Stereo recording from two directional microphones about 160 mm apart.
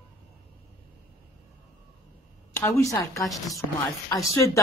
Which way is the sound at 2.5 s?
15° left (ahead or behind).